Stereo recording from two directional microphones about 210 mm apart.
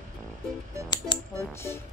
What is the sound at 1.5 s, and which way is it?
Speech, 10° left (ahead or behind).